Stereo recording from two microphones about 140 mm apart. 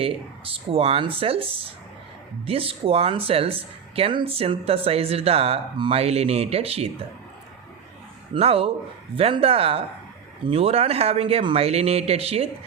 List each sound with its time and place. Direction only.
0.0 s speech: 40° right (ahead or behind)
8.3 s speech: 45° right (ahead or behind)